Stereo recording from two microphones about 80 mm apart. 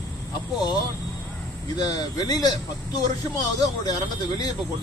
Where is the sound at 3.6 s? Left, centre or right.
Left.